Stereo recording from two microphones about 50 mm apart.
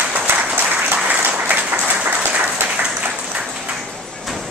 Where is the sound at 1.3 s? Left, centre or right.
Right.